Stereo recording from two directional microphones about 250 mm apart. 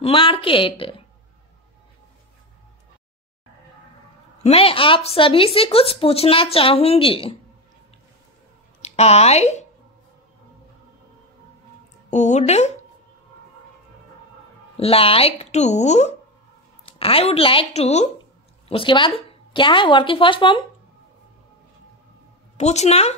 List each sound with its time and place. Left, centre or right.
0.0 s speech: left
4.4 s speech: left
8.8 s speech: left
12.1 s speech: left
14.8 s speech: left
22.6 s speech: left